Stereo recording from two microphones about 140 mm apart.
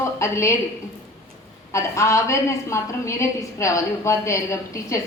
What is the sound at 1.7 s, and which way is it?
A woman's voice, 20° left (ahead or behind).